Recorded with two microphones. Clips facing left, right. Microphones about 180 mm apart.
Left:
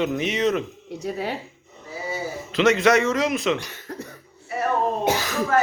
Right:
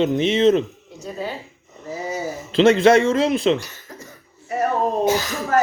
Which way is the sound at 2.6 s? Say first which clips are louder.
Right 5 dB; 30° right (ahead or behind).